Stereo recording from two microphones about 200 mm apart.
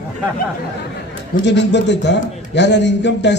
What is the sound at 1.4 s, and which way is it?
A man's voice, 60° left (ahead or behind).